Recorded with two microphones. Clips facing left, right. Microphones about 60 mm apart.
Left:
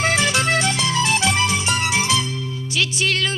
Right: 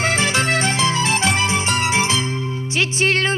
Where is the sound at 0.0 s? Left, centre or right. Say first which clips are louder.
Even; right.